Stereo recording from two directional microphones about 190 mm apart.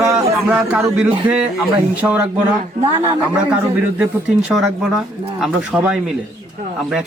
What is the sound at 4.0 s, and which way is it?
Speech, 5° right (ahead or behind).